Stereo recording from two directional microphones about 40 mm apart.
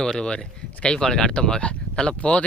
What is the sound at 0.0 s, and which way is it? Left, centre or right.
Speech, left.